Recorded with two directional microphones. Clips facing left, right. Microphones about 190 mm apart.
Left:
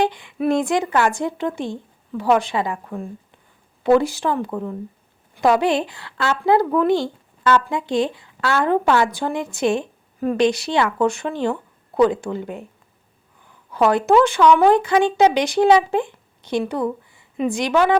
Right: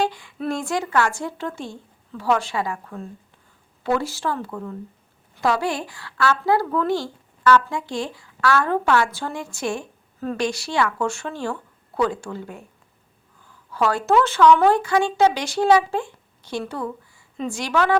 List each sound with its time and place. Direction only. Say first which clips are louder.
0.0 s speech: left 4 dB; 20° left (ahead or behind)
13.7 s speech: left 4 dB; 20° left (ahead or behind)